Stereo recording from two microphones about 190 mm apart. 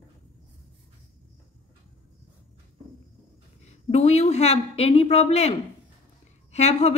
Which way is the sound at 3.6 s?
35° left (ahead or behind).